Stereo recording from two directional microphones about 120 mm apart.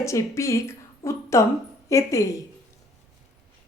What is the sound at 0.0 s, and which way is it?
A woman's voice, 25° left (ahead or behind).